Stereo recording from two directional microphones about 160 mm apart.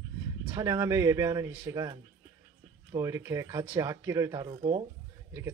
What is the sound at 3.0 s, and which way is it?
Speech, 20° right (ahead or behind).